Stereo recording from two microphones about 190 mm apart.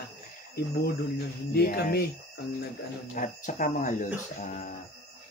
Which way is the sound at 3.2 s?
45° left (ahead or behind).